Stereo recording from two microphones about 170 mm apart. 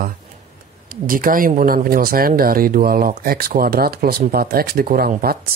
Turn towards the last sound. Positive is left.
turn(degrees=-65)  # may be behind; listen again after turning